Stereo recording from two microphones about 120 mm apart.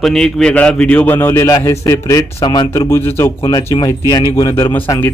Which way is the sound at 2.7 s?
20° left (ahead or behind).